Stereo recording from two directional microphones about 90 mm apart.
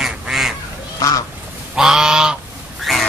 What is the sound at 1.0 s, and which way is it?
Goose, 40° left (ahead or behind).